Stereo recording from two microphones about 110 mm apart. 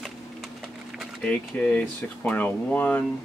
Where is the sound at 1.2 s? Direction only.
10° left (ahead or behind).